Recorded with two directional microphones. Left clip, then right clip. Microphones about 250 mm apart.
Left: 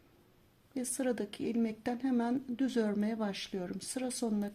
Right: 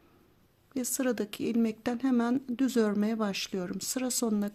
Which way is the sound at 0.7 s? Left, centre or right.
Right.